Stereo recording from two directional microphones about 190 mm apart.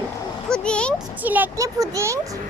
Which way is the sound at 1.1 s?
10° right (ahead or behind).